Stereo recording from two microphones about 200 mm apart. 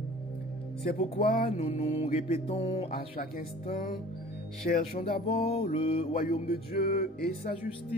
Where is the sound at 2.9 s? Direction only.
45° left (ahead or behind).